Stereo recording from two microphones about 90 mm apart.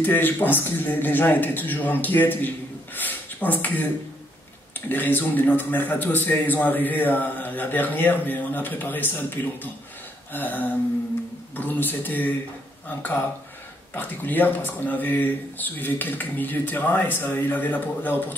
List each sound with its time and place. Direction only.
0.0 s a man's voice: 20° left (ahead or behind)